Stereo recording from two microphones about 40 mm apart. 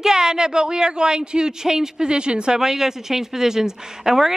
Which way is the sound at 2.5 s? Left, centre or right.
Centre.